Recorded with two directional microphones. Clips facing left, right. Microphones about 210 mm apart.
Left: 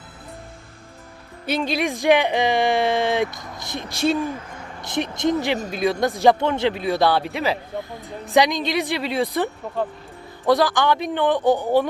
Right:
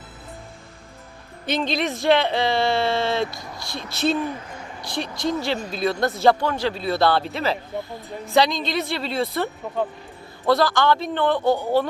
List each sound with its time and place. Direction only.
1.5 s speech: 10° left (ahead or behind)